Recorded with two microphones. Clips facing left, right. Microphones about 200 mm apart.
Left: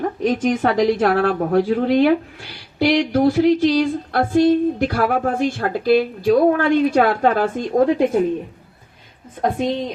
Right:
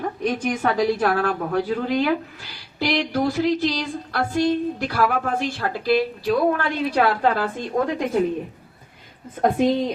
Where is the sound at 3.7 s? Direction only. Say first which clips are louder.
Left 8 dB; 50° left (ahead or behind).